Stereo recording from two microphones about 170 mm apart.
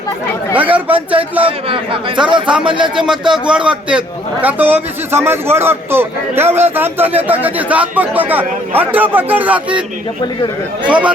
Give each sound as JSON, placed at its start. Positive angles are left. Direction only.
{"t": 0.5, "sound": "a man's voice", "side_deg": -10}
{"t": 1.4, "sound": "a man's voice", "side_deg": -30}
{"t": 2.9, "sound": "a man's voice", "side_deg": -5}
{"t": 10.8, "sound": "a man's voice", "side_deg": -10}